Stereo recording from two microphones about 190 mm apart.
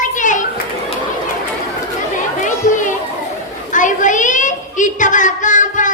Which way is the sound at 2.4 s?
40° left (ahead or behind).